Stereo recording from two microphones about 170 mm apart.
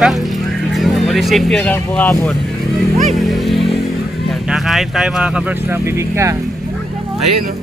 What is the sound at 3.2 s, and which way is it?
Music, centre (ahead or behind).